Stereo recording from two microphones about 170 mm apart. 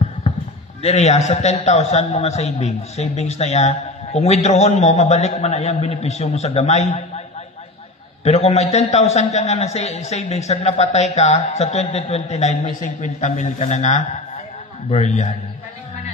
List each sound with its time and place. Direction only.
0.8 s a man's voice: 40° left (ahead or behind)
8.2 s a man's voice: 40° left (ahead or behind)